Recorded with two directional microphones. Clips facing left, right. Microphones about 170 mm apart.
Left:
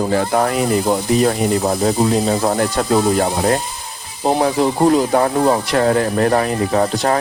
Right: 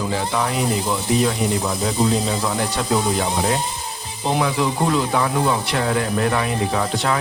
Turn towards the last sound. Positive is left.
turn(degrees=40)  # may be behind; listen again after turning